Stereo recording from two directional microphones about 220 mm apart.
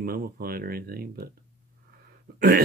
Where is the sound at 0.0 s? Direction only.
45° right (ahead or behind).